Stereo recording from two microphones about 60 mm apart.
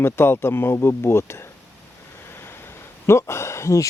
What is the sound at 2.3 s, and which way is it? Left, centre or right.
Vehicle, left.